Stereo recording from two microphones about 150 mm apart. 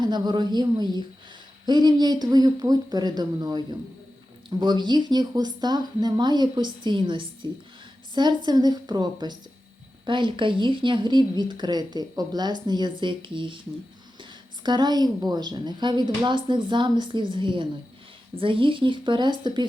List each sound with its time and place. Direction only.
0.0 s a woman's voice: 30° right (ahead or behind)